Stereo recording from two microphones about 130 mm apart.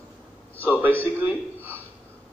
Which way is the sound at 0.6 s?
15° right (ahead or behind).